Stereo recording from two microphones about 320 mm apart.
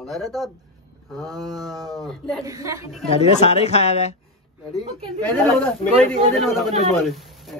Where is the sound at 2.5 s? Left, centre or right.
Centre.